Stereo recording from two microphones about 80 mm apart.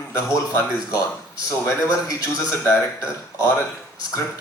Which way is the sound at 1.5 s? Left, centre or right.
Left.